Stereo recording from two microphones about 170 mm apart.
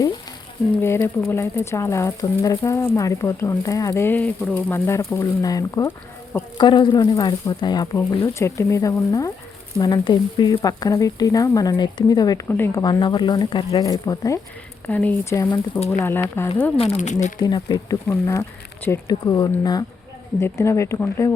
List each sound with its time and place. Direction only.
0.8 s speech: 15° left (ahead or behind)
12.8 s speech: 25° left (ahead or behind)
14.8 s speech: 10° left (ahead or behind)
16.7 s speech: 35° left (ahead or behind)
17.4 s speech: 20° left (ahead or behind)